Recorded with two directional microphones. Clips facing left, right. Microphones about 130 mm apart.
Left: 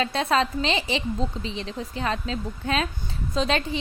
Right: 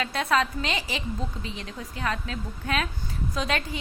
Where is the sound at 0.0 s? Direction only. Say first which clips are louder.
Left 2 dB; 25° left (ahead or behind).